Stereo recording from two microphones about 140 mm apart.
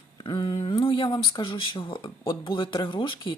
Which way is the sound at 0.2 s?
35° left (ahead or behind).